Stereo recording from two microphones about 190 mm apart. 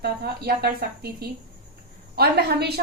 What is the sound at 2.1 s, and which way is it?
Speech, 60° right (ahead or behind).